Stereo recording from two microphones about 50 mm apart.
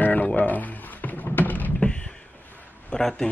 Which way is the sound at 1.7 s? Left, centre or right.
Left.